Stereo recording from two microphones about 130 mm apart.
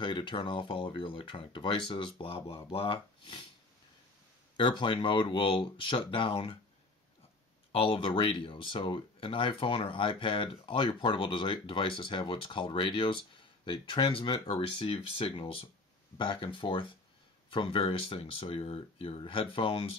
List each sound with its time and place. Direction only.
0.0 s speech: 40° left (ahead or behind)
4.6 s speech: 35° left (ahead or behind)
7.7 s speech: 40° left (ahead or behind)